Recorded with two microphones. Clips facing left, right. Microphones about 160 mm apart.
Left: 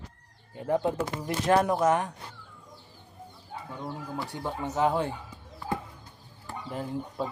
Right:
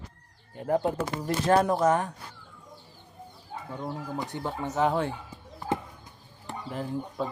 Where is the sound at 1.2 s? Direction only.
20° left (ahead or behind).